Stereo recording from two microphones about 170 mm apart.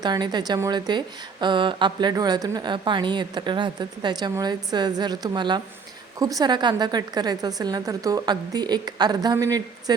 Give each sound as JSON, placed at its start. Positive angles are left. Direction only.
{"t": 0.0, "sound": "a woman's voice", "side_deg": -25}